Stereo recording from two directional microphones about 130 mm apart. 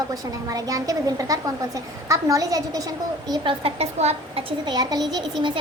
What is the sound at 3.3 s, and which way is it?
A woman's voice, 45° right (ahead or behind).